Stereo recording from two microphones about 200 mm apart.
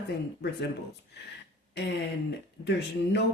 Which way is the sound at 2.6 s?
60° left (ahead or behind).